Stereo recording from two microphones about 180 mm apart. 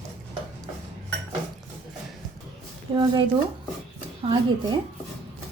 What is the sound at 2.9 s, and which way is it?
Speech, 25° right (ahead or behind).